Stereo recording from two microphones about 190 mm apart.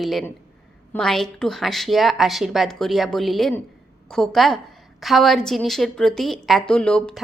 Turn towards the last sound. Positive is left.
turn(degrees=5)  # may be behind; listen again after turning